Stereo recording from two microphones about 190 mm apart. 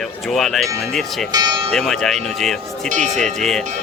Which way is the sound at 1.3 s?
20° right (ahead or behind).